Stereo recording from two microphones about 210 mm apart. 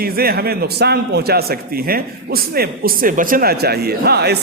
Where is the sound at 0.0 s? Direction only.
45° right (ahead or behind).